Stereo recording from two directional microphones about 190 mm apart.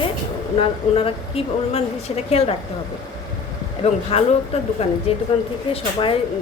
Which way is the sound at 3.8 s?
30° left (ahead or behind).